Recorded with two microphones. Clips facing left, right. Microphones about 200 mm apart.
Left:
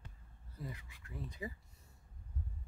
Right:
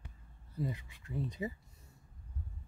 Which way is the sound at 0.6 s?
25° right (ahead or behind).